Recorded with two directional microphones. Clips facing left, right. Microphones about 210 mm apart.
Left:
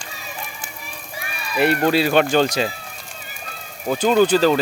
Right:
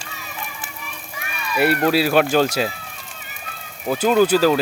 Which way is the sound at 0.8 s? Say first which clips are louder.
Left 1 dB; 35° left (ahead or behind).